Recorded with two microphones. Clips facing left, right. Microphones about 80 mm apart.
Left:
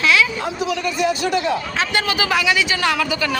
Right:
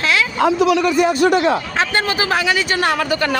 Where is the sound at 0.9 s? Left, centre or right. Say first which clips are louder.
Right 5 dB; right.